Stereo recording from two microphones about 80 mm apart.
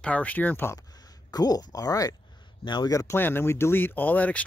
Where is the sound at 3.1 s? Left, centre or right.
Left.